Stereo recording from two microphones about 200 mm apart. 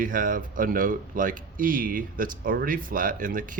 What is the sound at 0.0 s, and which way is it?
A man's voice, 45° right (ahead or behind).